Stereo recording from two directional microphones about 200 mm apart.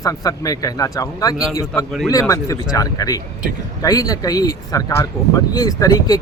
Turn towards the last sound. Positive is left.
turn(degrees=20)  # may be behind; listen again after turning